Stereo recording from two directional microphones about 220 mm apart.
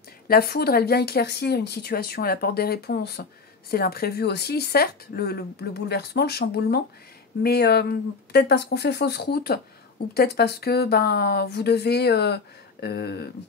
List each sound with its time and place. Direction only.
0.3 s speech: 45° left (ahead or behind)